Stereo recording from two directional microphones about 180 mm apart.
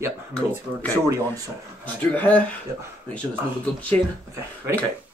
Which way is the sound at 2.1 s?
10° left (ahead or behind).